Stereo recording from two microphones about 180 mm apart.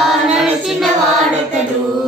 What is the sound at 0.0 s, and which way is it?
Child singing, centre (ahead or behind).